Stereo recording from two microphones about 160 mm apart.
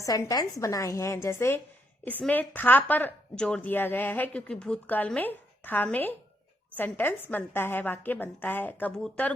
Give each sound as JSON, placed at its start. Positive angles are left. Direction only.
{"t": 0.0, "sound": "a woman's voice", "side_deg": 20}